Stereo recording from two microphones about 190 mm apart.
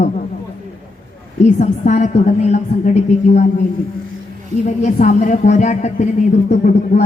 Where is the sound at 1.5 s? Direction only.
40° left (ahead or behind).